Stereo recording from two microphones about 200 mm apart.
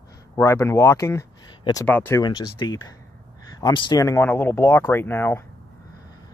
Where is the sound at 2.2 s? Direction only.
20° left (ahead or behind).